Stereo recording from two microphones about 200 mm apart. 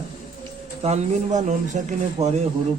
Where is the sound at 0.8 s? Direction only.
35° right (ahead or behind).